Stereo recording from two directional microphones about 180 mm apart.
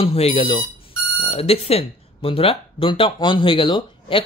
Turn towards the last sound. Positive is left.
turn(degrees=30)  # may be behind; listen again after turning